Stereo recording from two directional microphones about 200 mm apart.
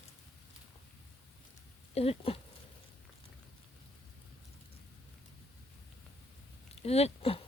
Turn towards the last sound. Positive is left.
turn(degrees=30)  # may be behind; listen again after turning